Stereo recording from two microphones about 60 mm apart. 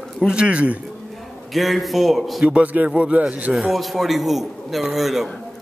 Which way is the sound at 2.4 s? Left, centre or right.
Right.